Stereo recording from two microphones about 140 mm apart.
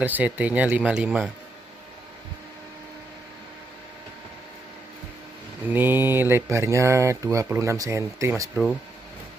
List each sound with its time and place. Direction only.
0.0 s speech: 10° right (ahead or behind)
5.7 s speech: 15° right (ahead or behind)